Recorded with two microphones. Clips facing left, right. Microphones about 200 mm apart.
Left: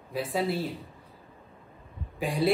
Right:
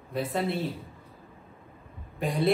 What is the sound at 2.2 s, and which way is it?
Speech, centre (ahead or behind).